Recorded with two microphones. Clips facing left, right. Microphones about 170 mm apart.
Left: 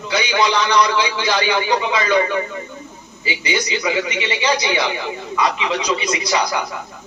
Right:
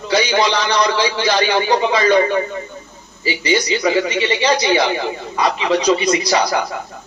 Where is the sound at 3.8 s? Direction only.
35° right (ahead or behind).